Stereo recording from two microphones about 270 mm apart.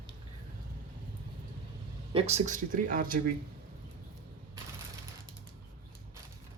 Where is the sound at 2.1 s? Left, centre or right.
Right.